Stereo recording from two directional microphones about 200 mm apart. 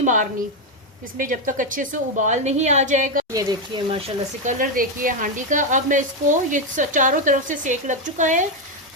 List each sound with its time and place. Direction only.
0.0 s a woman's voice: 40° right (ahead or behind)
3.3 s speech: 25° right (ahead or behind)
4.4 s a woman's voice: 45° right (ahead or behind)